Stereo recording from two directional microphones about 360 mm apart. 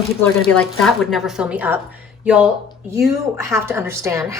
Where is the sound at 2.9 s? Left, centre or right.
Centre.